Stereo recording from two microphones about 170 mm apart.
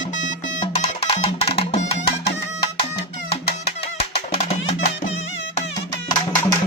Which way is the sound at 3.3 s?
35° left (ahead or behind).